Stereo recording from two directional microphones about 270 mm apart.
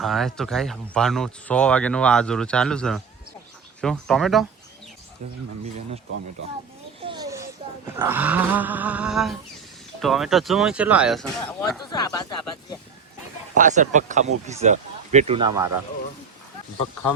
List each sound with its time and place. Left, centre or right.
0.0 s speech: centre
7.0 s a sound: centre
7.9 s speech: centre
11.9 s speech: centre
13.6 s speech: right